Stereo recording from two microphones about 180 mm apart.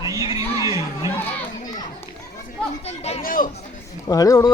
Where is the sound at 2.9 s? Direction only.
35° left (ahead or behind).